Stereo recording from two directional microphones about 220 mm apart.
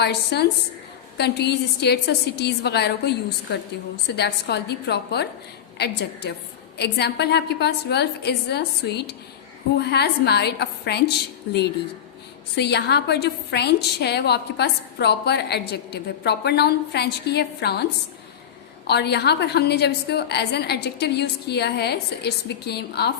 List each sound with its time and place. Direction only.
0.0 s a woman's voice: 50° left (ahead or behind)
18.9 s a woman's voice: 50° left (ahead or behind)